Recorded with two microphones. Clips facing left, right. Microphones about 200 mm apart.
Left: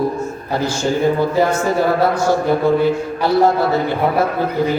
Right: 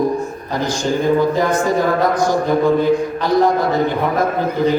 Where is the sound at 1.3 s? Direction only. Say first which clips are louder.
Even; 15° right (ahead or behind).